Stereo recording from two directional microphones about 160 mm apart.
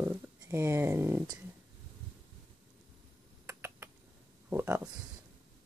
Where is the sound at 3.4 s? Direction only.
15° right (ahead or behind).